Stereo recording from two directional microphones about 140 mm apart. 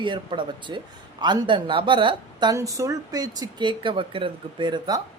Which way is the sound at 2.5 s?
20° right (ahead or behind).